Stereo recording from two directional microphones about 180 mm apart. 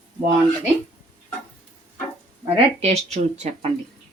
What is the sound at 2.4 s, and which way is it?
Speech, 35° right (ahead or behind).